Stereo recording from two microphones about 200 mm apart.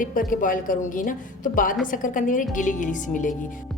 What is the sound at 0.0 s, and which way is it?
A woman's voice, 45° left (ahead or behind).